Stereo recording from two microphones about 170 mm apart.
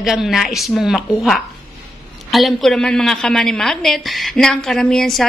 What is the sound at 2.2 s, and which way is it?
A woman's voice, centre (ahead or behind).